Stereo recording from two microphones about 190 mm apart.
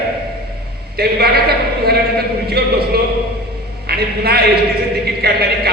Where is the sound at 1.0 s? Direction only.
55° right (ahead or behind).